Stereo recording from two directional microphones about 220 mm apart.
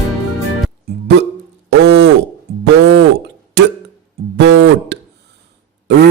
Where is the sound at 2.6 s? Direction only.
50° right (ahead or behind).